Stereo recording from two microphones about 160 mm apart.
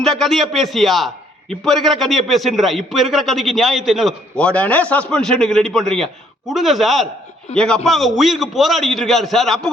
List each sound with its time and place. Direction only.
0.0 s a man's voice: centre (ahead or behind)